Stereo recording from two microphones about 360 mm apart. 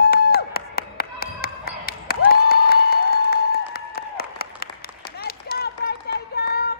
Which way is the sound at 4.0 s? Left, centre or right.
Left.